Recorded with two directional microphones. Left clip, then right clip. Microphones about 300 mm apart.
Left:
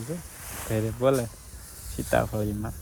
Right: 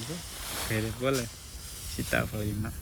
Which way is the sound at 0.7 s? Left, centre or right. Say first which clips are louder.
Left 7 dB; centre.